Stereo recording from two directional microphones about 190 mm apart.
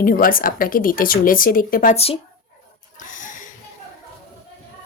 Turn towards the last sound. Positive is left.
turn(degrees=45)  # may be behind; listen again after turning